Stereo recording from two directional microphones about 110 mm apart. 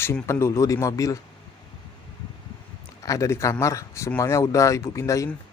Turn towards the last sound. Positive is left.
turn(degrees=30)  # may be behind; listen again after turning